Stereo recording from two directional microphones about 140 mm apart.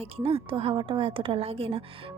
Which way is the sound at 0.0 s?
45° right (ahead or behind).